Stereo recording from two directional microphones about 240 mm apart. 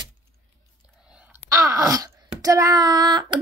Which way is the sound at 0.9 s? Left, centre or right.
Centre.